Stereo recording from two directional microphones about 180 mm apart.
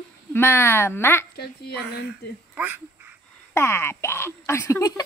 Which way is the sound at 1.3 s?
60° left (ahead or behind).